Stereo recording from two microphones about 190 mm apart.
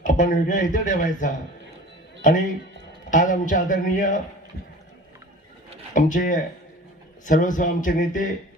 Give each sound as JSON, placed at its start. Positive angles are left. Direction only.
{"t": 0.0, "sound": "speech", "side_deg": 40}
{"t": 5.9, "sound": "speech", "side_deg": 45}